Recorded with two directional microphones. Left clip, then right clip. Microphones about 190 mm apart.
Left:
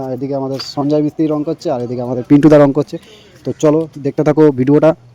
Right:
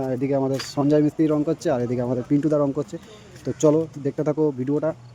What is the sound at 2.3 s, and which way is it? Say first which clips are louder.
Speech: left 15 dB; 50° left (ahead or behind).